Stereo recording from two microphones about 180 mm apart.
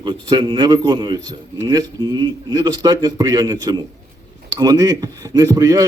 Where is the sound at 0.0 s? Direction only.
25° right (ahead or behind).